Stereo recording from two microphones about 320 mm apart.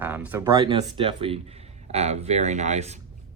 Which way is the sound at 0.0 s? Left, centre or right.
Centre.